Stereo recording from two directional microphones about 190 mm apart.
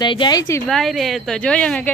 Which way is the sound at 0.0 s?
25° left (ahead or behind).